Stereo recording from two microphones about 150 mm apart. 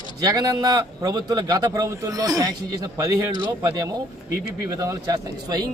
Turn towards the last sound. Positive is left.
turn(degrees=-25)  # may be behind; listen again after turning